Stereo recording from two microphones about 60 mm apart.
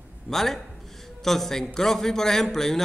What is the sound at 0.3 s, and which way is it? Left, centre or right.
Speech, centre.